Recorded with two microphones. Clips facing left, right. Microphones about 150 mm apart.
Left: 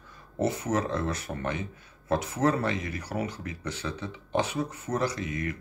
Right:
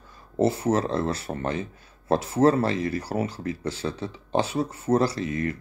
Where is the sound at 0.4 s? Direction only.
30° right (ahead or behind).